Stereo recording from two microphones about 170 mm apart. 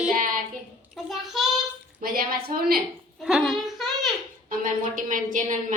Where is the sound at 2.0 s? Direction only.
55° right (ahead or behind).